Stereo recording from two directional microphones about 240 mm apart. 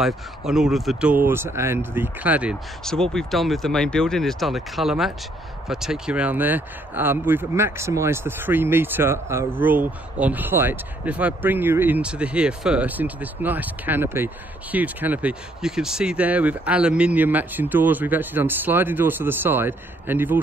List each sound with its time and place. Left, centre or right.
0.0 s speech: centre